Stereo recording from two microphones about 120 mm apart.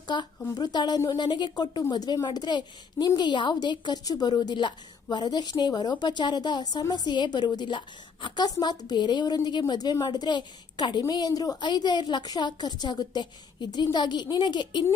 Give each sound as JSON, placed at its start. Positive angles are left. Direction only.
{"t": 0.1, "sound": "a woman's voice", "side_deg": 40}